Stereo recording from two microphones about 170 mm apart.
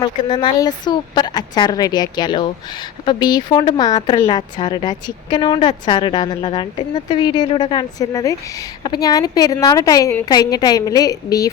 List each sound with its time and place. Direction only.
0.0 s speech: 25° left (ahead or behind)